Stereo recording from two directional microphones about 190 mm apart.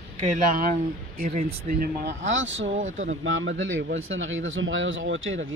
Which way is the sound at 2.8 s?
40° right (ahead or behind).